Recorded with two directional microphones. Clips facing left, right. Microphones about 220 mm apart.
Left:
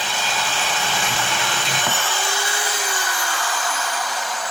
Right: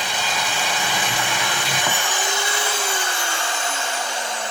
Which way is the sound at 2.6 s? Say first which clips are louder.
Right 1 dB; 25° right (ahead or behind).